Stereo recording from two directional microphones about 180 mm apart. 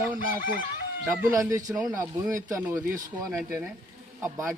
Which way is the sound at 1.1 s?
15° right (ahead or behind).